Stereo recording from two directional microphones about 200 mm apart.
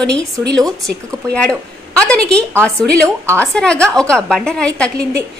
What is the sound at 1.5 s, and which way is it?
Speech, 5° left (ahead or behind).